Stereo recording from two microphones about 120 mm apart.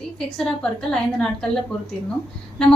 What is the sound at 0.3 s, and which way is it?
A woman's voice, 5° left (ahead or behind).